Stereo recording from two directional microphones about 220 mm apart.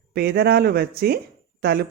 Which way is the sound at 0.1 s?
45° right (ahead or behind).